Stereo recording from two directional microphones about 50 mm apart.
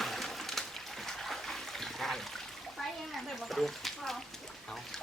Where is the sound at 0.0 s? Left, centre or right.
Centre.